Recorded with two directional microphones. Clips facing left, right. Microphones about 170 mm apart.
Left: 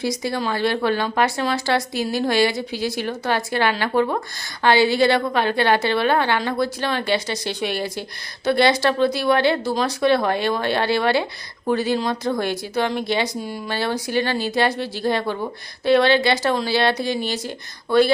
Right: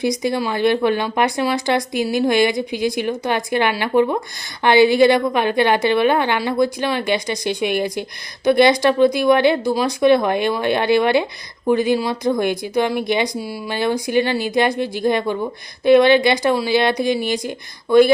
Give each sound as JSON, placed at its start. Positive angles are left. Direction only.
{"t": 0.0, "sound": "speech", "side_deg": -20}